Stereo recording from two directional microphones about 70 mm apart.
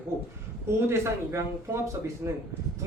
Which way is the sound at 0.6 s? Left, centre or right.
Right.